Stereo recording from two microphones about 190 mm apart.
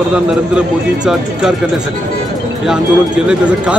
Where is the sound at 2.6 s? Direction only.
5° right (ahead or behind).